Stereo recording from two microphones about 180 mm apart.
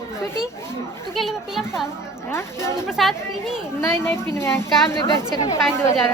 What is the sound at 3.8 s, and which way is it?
Speech, 15° left (ahead or behind).